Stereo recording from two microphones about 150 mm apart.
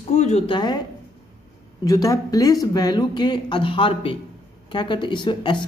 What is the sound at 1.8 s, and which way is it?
A woman's voice, 25° left (ahead or behind).